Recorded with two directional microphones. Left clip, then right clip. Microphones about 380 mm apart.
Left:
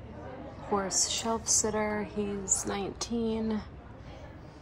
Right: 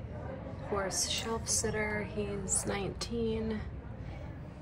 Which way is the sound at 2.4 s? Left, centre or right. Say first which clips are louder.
Left 4 dB; left.